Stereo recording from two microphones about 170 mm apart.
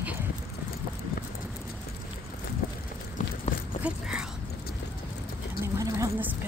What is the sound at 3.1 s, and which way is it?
Run, 45° left (ahead or behind).